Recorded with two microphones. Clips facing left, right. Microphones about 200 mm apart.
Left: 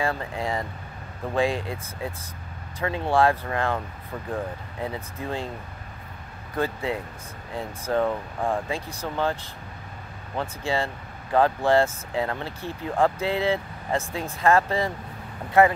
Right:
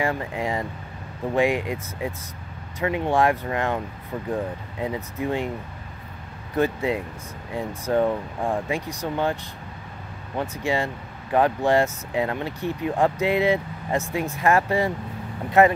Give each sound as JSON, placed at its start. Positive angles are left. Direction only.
{"t": 0.0, "sound": "speech", "side_deg": -15}
{"t": 6.5, "sound": "speech", "side_deg": -20}